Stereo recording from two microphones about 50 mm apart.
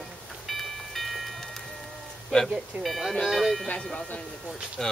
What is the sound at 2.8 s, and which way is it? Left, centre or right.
Speech, centre.